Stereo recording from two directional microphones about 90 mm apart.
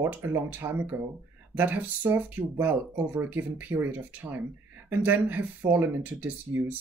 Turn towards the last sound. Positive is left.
turn(degrees=-20)  # may be behind; listen again after turning